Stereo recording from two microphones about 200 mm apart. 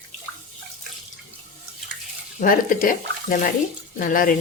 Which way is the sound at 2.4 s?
45° left (ahead or behind).